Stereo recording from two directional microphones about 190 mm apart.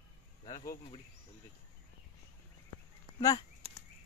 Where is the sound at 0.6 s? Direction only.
35° left (ahead or behind).